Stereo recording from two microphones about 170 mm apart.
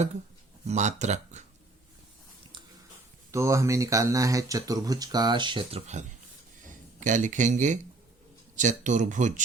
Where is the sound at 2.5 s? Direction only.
30° right (ahead or behind).